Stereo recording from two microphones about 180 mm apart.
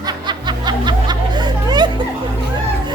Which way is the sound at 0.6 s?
25° right (ahead or behind).